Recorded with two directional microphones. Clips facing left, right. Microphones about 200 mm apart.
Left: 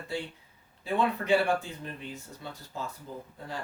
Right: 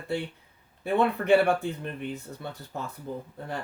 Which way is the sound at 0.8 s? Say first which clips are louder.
Right 4 dB; 60° right (ahead or behind).